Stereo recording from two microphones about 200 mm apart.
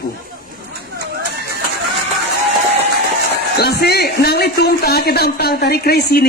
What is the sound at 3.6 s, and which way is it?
A man's voice, 50° left (ahead or behind).